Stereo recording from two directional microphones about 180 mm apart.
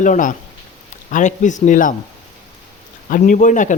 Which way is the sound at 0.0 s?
45° left (ahead or behind).